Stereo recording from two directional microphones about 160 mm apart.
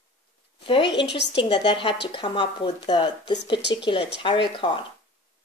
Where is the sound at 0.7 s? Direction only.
30° left (ahead or behind).